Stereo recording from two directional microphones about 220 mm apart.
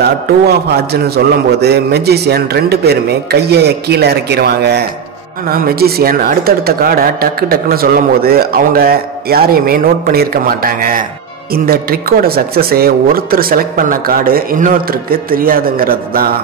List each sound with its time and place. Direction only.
0.0 s speech: 45° right (ahead or behind)